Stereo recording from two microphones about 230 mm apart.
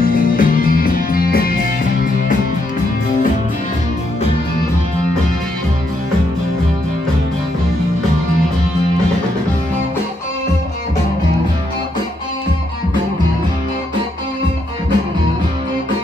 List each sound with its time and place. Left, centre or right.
0.0 s music: left